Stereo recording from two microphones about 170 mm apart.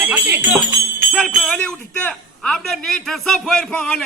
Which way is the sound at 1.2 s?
5° left (ahead or behind).